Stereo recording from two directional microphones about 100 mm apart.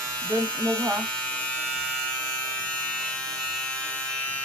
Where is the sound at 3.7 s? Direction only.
10° left (ahead or behind).